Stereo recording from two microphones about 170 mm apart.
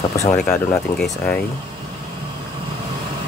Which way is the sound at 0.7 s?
5° left (ahead or behind).